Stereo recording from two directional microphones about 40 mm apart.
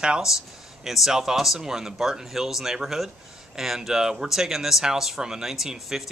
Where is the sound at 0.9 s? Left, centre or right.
Centre.